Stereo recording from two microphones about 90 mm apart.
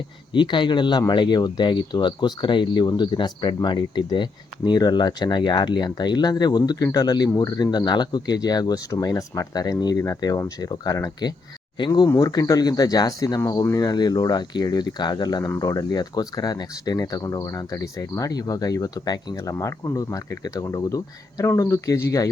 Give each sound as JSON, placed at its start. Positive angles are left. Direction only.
{"t": 0.3, "sound": "speech", "side_deg": 60}
{"t": 19.4, "sound": "speech", "side_deg": 35}